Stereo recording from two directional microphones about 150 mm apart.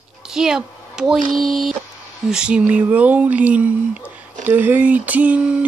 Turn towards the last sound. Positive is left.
turn(degrees=-10)  # may be behind; listen again after turning